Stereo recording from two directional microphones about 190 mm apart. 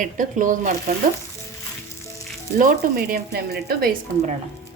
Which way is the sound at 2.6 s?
45° right (ahead or behind).